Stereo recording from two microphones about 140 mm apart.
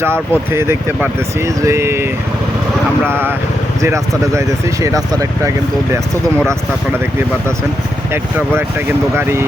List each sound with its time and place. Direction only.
0.0 s speech: 15° right (ahead or behind)
3.1 s speech: 15° right (ahead or behind)
9.1 s speech: 20° right (ahead or behind)